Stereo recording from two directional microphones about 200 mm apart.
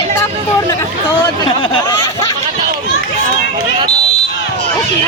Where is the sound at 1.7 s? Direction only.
20° left (ahead or behind).